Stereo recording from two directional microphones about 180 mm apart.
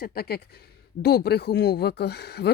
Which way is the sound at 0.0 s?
60° left (ahead or behind).